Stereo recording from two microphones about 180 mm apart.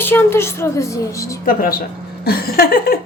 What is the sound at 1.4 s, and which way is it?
Speech, 50° left (ahead or behind).